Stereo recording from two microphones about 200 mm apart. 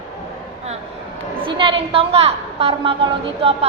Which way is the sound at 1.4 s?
25° right (ahead or behind).